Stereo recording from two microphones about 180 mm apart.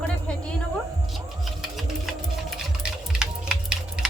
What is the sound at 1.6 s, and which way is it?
Sewing machine, centre (ahead or behind).